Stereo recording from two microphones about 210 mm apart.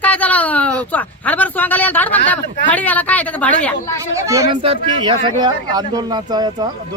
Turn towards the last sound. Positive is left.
turn(degrees=-20)  # may be behind; listen again after turning